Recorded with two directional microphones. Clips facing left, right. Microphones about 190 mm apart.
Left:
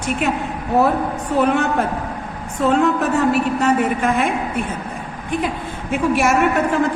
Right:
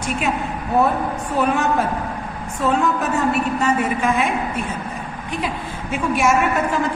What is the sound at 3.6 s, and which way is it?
A woman's voice, 55° left (ahead or behind).